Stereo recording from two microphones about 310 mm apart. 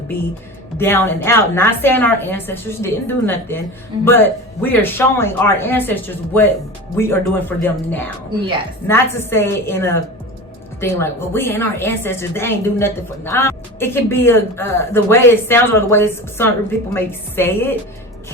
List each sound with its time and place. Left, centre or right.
0.8 s a woman's voice: centre